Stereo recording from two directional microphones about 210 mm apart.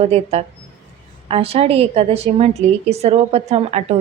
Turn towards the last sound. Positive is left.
turn(degrees=-30)  # may be behind; listen again after turning